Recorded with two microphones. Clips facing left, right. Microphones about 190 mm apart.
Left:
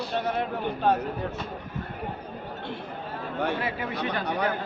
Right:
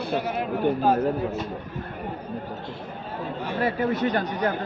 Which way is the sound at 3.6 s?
40° right (ahead or behind).